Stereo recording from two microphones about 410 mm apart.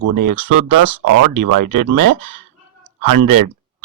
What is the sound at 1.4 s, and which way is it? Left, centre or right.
Speech, right.